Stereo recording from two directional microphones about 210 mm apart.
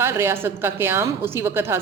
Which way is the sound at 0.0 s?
10° right (ahead or behind).